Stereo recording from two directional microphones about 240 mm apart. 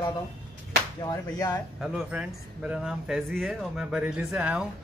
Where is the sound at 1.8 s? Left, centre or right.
Centre.